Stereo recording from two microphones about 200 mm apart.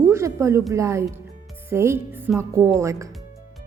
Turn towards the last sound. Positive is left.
turn(degrees=-15)  # may be behind; listen again after turning